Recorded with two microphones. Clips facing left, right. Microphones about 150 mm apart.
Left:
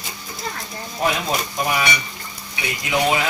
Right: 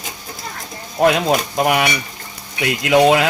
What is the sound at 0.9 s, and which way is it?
Speech, 70° right (ahead or behind).